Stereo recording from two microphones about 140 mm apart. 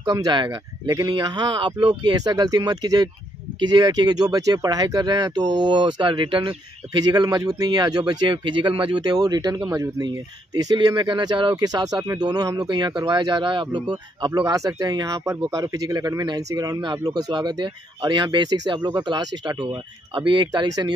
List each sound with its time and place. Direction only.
0.0 s speech: 30° right (ahead or behind)